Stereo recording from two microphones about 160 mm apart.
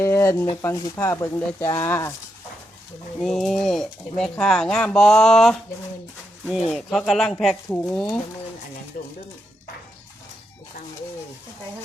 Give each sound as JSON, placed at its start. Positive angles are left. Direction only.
{"t": 0.0, "sound": "a sound", "side_deg": 15}
{"t": 0.6, "sound": "speech", "side_deg": 15}
{"t": 3.2, "sound": "speech", "side_deg": 0}
{"t": 6.7, "sound": "speech", "side_deg": 0}
{"t": 8.9, "sound": "speech", "side_deg": 55}